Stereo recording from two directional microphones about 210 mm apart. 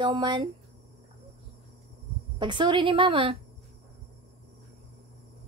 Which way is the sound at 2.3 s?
20° right (ahead or behind).